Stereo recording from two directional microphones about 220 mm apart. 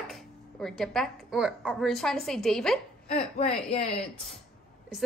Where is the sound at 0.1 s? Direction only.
Centre (ahead or behind).